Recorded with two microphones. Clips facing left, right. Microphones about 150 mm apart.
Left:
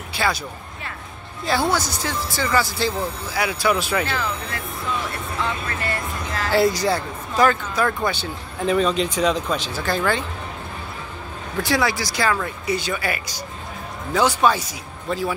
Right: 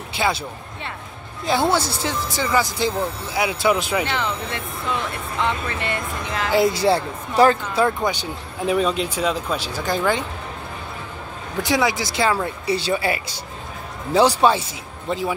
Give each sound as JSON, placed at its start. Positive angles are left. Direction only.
{"t": 0.1, "sound": "speech", "side_deg": -20}
{"t": 1.4, "sound": "speech", "side_deg": -20}
{"t": 11.6, "sound": "speech", "side_deg": -20}